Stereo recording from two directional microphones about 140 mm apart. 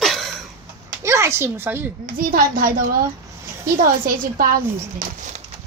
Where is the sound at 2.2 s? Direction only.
85° right.